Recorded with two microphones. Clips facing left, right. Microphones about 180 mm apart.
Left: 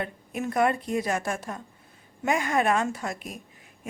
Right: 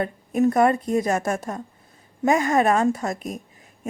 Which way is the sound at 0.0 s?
40° right (ahead or behind).